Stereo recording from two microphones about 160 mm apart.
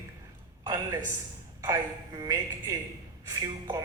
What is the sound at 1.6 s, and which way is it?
A woman's voice, 25° right (ahead or behind).